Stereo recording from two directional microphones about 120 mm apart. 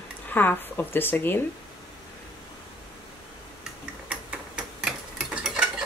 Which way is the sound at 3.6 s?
10° right (ahead or behind).